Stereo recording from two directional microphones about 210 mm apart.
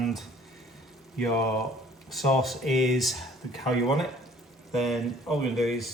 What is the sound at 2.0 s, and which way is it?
Speech, centre (ahead or behind).